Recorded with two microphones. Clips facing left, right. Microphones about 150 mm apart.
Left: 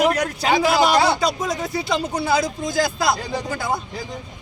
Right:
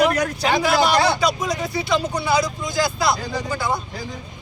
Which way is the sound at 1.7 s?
50° left (ahead or behind).